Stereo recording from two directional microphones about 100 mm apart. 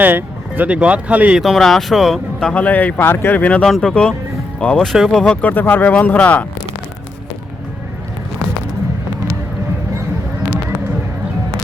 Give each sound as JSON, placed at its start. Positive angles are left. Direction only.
{"t": 0.0, "sound": "speech", "side_deg": -20}
{"t": 1.4, "sound": "speech", "side_deg": 0}
{"t": 2.5, "sound": "speech", "side_deg": 15}
{"t": 5.4, "sound": "speech", "side_deg": 20}